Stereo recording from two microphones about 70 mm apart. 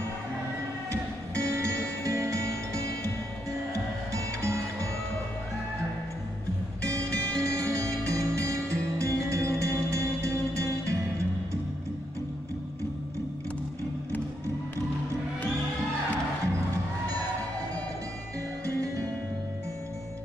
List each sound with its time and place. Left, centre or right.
1.3 s music: right
4.1 s music: right
6.8 s music: right